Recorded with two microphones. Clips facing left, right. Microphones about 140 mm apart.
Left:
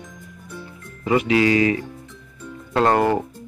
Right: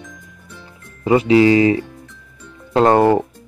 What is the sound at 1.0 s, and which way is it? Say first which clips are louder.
Speech: right 6 dB; 30° right (ahead or behind).